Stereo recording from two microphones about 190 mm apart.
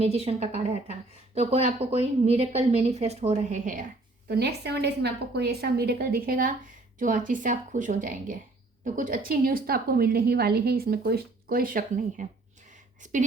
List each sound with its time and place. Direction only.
0.0 s a woman's voice: 35° right (ahead or behind)
4.3 s a woman's voice: 60° right (ahead or behind); by 13.2 s 40° right (ahead or behind)